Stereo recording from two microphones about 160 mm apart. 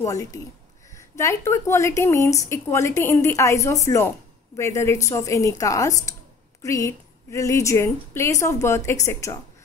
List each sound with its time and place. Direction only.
0.0 s speech: 20° left (ahead or behind)